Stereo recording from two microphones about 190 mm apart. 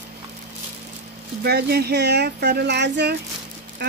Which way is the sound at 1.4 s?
55° right (ahead or behind).